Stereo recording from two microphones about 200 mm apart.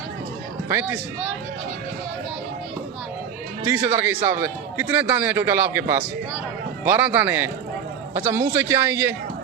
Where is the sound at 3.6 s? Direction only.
10° right (ahead or behind).